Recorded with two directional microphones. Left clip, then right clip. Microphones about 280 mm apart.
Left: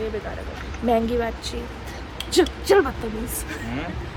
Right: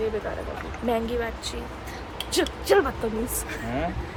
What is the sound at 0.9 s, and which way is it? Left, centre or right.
A woman's voice, centre.